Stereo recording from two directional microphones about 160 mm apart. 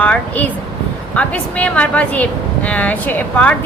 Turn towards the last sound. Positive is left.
turn(degrees=10)  # may be behind; listen again after turning